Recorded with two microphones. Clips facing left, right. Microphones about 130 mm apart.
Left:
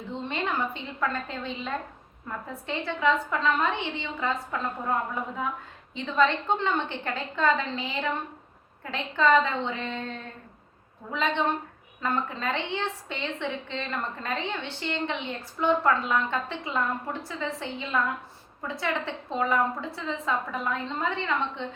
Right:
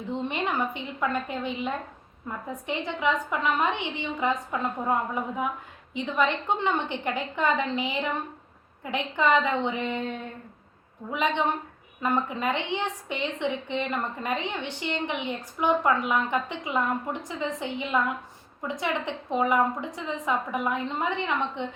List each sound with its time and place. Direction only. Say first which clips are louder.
0.1 s a woman's voice: right 2 dB; 15° right (ahead or behind)